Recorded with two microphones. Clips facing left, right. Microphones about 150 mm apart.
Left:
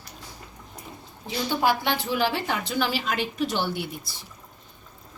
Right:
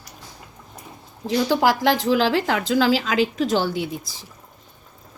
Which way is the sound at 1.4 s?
90° right.